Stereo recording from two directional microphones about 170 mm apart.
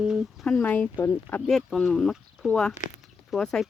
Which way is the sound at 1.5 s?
Centre (ahead or behind).